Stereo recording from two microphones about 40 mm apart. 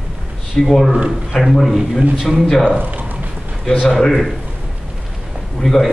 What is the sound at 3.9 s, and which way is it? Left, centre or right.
Speech, centre.